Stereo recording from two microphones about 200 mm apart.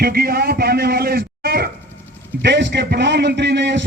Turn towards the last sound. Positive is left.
turn(degrees=-60)  # may be behind; listen again after turning